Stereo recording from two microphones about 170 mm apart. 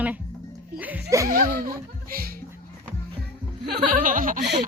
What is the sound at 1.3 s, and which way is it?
Laughter, 55° right (ahead or behind).